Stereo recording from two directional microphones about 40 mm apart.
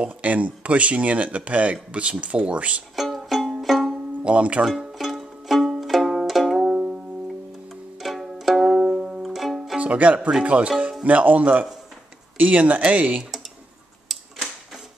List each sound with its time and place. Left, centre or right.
0.0 s speech: right
3.0 s music: centre
3.6 s banjo: centre
4.2 s speech: right
4.6 s music: centre
8.0 s music: centre
8.9 s music: right
9.2 s music: centre
9.8 s speech: right